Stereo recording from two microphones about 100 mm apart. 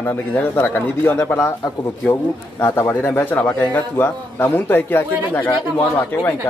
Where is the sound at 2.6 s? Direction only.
25° left (ahead or behind).